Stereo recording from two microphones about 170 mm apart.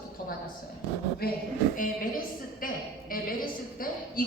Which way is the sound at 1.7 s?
55° left (ahead or behind).